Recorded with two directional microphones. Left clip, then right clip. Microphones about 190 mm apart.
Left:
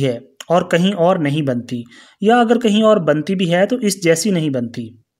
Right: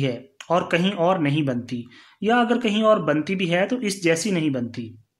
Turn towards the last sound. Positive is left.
turn(degrees=45)  # may be behind; listen again after turning